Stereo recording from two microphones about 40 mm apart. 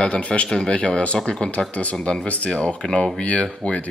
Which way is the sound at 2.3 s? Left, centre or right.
Left.